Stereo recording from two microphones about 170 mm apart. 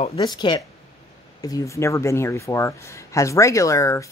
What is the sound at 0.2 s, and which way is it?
Speech, 25° left (ahead or behind).